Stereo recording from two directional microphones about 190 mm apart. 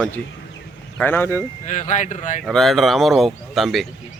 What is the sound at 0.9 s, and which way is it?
Speech, 10° left (ahead or behind).